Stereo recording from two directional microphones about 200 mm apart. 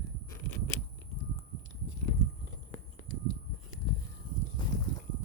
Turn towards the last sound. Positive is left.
turn(degrees=25)  # may be behind; listen again after turning